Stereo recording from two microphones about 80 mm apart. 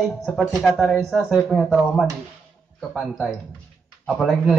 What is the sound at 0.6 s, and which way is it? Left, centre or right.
Speech, centre.